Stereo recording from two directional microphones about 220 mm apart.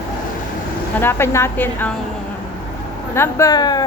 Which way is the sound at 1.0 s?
10° left (ahead or behind).